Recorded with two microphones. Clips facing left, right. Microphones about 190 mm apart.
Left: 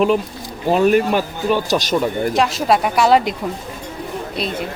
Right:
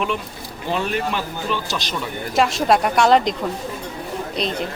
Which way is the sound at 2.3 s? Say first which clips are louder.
Right 2 dB; centre (ahead or behind).